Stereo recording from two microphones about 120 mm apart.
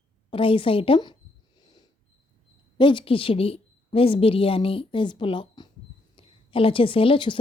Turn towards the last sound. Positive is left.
turn(degrees=45)  # may be behind; listen again after turning